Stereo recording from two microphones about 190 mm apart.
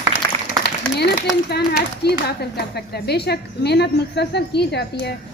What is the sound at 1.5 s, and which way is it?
Speech, 60° left (ahead or behind).